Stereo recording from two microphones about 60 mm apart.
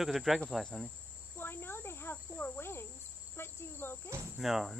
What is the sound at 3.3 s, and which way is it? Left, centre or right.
Insect, left.